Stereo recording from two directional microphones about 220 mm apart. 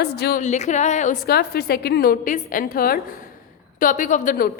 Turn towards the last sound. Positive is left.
turn(degrees=35)  # may be behind; listen again after turning